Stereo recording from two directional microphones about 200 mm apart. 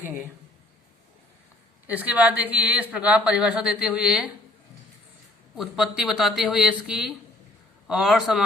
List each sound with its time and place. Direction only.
0.0 s speech: 10° right (ahead or behind)
1.9 s speech: 10° right (ahead or behind)
5.5 s speech: centre (ahead or behind)